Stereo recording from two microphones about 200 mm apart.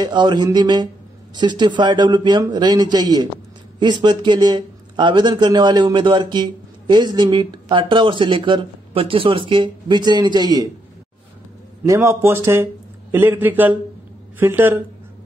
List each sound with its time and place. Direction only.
0.0 s speech: 20° right (ahead or behind)
11.8 s speech: 15° right (ahead or behind)